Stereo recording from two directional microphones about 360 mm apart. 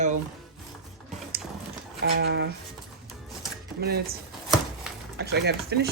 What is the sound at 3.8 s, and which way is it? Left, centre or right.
Speech, right.